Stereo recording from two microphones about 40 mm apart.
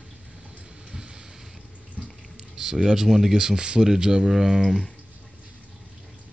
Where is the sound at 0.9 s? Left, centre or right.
Centre.